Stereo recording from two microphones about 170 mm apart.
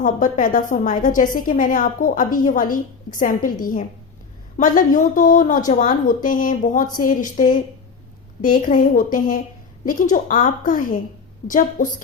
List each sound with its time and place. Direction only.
0.0 s a woman's voice: 50° left (ahead or behind)